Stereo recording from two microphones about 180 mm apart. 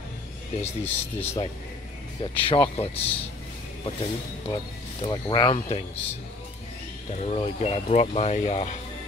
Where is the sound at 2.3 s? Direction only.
30° left (ahead or behind).